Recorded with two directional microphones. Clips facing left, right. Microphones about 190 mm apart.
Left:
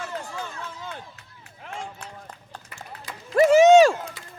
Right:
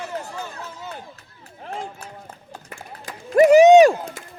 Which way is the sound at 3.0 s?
50° right (ahead or behind).